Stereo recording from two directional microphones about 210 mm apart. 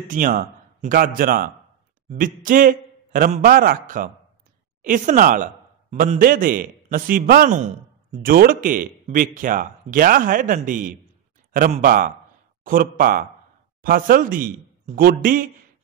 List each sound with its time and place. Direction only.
0.0 s a man's voice: 40° right (ahead or behind)